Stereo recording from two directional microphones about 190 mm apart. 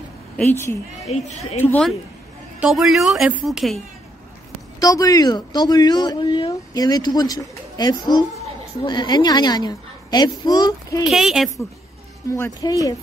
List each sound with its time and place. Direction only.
0.4 s speech: 10° left (ahead or behind)
1.0 s a woman's voice: 35° left (ahead or behind)
1.6 s speech: 5° left (ahead or behind)
4.7 s speech: 20° left (ahead or behind)
11.1 s speech: centre (ahead or behind)
12.4 s speech: 20° left (ahead or behind)